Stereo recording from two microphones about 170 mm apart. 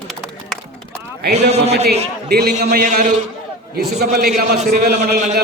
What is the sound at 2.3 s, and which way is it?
Speech, 70° right (ahead or behind).